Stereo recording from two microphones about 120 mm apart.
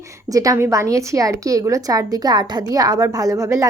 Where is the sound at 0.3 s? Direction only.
30° right (ahead or behind).